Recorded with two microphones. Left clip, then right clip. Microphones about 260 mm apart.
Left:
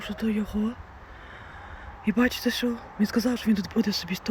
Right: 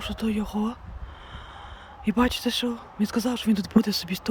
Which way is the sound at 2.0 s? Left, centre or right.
Centre.